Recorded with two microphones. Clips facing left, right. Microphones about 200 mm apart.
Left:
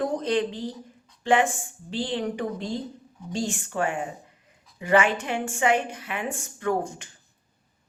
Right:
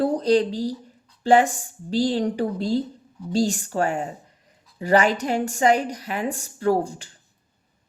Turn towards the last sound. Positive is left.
turn(degrees=-35)  # may be behind; listen again after turning